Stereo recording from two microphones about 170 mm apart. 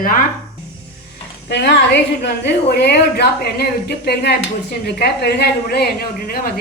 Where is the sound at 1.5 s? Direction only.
85° left.